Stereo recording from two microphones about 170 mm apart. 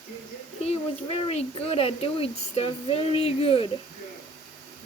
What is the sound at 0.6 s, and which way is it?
Speech, 35° left (ahead or behind).